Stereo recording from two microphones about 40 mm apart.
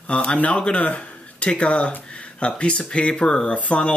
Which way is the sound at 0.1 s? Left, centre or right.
Left.